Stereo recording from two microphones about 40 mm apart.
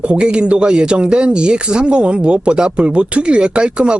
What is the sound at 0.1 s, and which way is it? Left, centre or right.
Speech, right.